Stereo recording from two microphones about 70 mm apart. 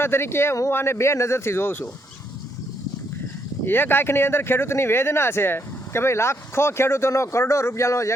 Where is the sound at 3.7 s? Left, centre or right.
Left.